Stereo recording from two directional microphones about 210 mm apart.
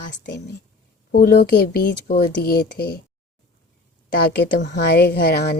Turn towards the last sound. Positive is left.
turn(degrees=50)  # may be behind; listen again after turning